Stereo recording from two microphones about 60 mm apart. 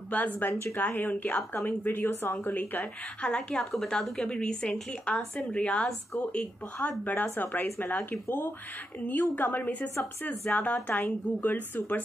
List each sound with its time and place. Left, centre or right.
0.1 s speech: left
3.2 s speech: centre